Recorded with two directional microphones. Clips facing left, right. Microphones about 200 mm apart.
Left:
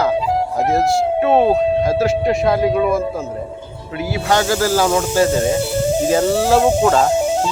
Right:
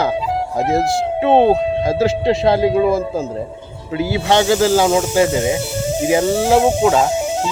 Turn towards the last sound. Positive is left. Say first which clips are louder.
# even
turn(degrees=-10)  # may be behind; listen again after turning